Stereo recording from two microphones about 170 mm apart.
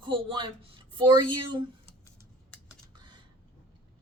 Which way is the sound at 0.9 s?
30° right (ahead or behind).